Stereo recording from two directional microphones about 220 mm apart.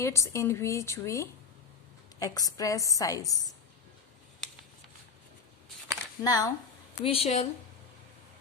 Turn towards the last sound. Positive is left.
turn(degrees=30)  # may be behind; listen again after turning